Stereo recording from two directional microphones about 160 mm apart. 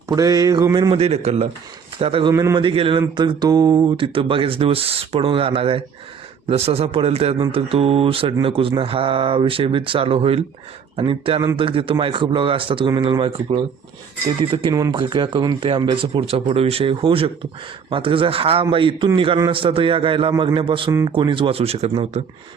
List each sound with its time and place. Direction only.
0.1 s speech: 25° right (ahead or behind)
2.3 s speech: 20° right (ahead or behind)
2.6 s speech: 35° right (ahead or behind)